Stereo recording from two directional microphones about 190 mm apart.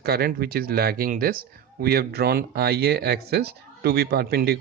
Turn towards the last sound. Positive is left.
turn(degrees=-55)  # may be behind; listen again after turning